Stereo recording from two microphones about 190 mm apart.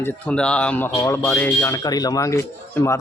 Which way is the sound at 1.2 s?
10° left (ahead or behind).